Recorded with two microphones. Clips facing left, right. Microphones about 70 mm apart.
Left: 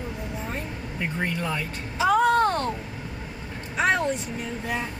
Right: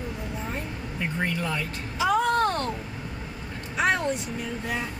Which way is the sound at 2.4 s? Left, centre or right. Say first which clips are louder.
Left 2 dB; left.